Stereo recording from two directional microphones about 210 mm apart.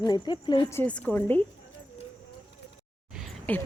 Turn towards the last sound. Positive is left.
turn(degrees=5)  # may be behind; listen again after turning